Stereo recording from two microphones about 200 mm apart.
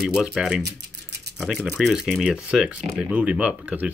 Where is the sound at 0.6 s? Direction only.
55° right (ahead or behind).